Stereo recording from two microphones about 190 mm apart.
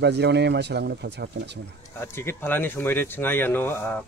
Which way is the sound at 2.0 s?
10° left (ahead or behind).